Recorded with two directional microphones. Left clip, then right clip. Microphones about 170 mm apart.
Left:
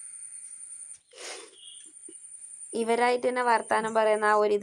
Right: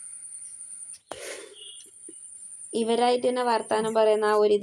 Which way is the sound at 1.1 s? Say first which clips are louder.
Right 1 dB; 25° left (ahead or behind).